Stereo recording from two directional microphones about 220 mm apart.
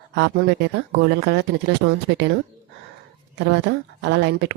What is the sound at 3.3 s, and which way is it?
Speech, 50° right (ahead or behind).